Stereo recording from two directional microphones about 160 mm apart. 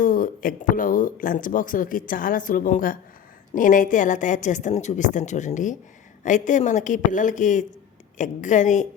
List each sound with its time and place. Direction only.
0.0 s speech: 55° left (ahead or behind)